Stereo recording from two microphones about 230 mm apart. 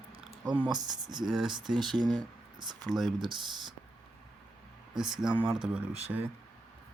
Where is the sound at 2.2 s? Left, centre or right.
Centre.